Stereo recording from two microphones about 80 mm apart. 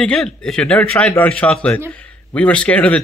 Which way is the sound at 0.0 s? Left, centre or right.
Centre.